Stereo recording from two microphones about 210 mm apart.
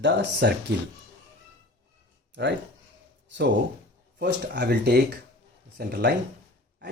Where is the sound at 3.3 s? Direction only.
55° right (ahead or behind).